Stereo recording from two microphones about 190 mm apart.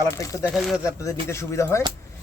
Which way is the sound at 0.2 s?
15° left (ahead or behind).